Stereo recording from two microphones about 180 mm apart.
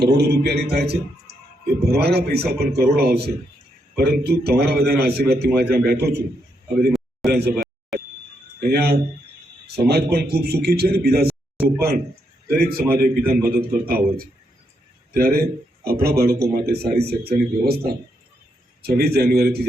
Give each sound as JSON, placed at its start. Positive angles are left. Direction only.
{"t": 0.0, "sound": "a man's voice", "side_deg": -65}
{"t": 7.3, "sound": "speech", "side_deg": -60}
{"t": 8.6, "sound": "a man's voice", "side_deg": -60}
{"t": 12.5, "sound": "a man's voice", "side_deg": -55}